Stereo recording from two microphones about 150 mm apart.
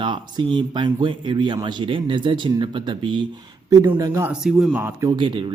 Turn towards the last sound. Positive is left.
turn(degrees=-30)  # may be behind; listen again after turning